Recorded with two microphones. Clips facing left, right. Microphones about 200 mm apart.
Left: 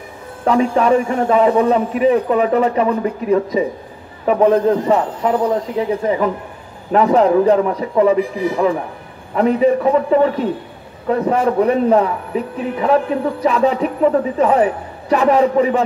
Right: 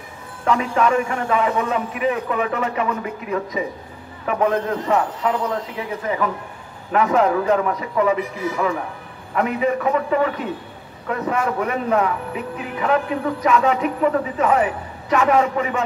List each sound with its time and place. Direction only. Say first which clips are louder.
0.5 s a man's voice: left 5 dB; 35° left (ahead or behind)